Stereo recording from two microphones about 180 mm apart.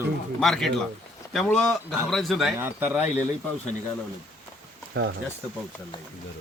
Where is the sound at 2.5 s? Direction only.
10° right (ahead or behind).